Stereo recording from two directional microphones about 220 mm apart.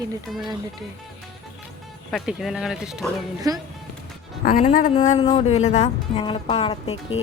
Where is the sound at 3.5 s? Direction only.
15° right (ahead or behind).